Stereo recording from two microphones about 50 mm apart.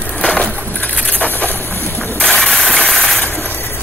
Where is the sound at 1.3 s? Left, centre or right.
Left.